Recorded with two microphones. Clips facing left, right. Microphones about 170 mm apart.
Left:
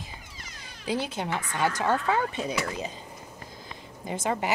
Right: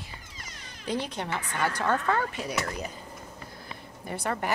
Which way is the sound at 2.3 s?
25° left (ahead or behind).